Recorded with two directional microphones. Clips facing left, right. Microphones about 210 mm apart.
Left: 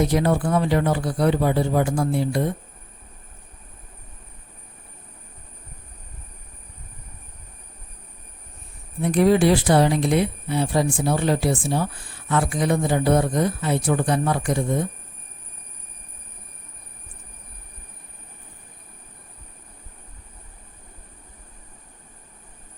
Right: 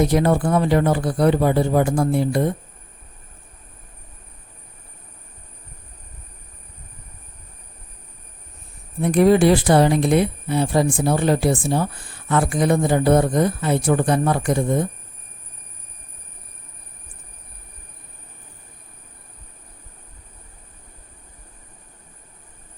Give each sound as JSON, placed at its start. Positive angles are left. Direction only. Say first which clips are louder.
{"t": 0.1, "sound": "speech", "louder": "right 3 dB", "side_deg": -50}
{"t": 9.0, "sound": "speech", "louder": "right 3 dB", "side_deg": -50}